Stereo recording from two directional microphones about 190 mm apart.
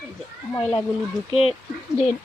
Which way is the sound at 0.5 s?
10° left (ahead or behind).